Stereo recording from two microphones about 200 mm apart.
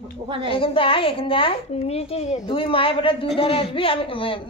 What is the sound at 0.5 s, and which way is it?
A woman's voice, 25° left (ahead or behind).